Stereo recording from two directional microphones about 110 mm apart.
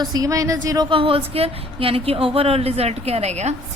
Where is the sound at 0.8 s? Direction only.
55° right (ahead or behind).